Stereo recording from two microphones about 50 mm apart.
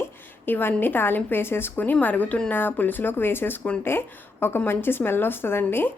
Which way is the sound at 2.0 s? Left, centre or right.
Left.